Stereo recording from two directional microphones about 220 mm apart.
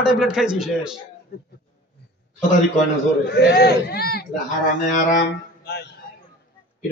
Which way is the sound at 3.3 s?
50° left (ahead or behind).